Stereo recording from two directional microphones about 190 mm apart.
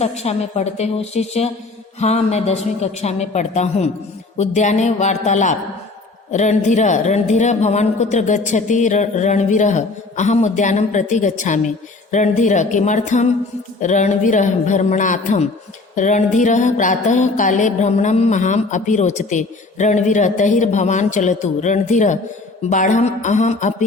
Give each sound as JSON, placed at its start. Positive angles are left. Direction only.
{"t": 0.0, "sound": "music", "side_deg": 35}